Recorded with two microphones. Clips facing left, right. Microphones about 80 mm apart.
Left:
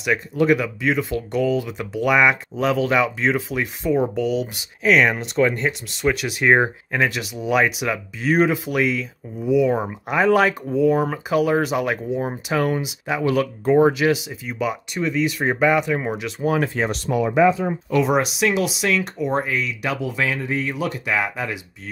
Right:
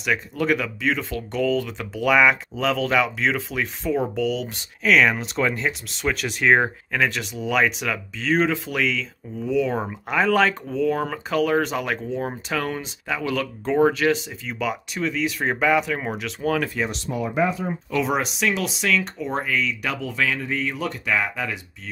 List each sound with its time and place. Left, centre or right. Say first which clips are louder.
0.0 s speech: left 4 dB; centre
16.4 s speech: left 2 dB; left
17.1 s speech: left 7 dB; left
17.9 s speech: left 4 dB; centre